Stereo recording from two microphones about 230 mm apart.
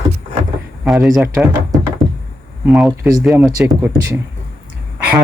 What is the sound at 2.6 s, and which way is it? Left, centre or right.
Speech, centre.